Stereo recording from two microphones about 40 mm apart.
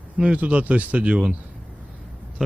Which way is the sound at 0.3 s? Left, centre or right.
Right.